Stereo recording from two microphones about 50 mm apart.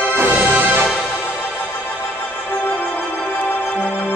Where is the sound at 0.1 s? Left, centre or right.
Right.